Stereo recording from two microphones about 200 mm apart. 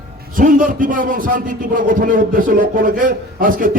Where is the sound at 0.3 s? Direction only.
40° right (ahead or behind).